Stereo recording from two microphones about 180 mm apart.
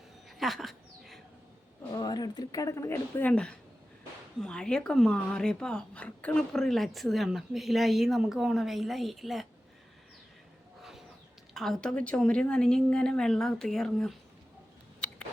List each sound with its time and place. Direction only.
0.3 s dog: centre (ahead or behind)
1.9 s speech: 20° left (ahead or behind); by 9.5 s centre (ahead or behind)
11.5 s speech: centre (ahead or behind)